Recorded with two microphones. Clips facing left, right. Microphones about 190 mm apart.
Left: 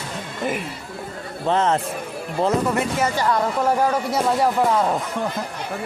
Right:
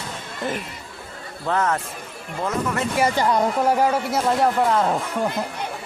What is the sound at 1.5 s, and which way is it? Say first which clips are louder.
Speech: left 3 dB; 25° left (ahead or behind).